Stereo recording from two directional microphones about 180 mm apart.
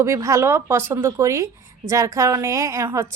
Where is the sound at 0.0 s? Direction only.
15° right (ahead or behind).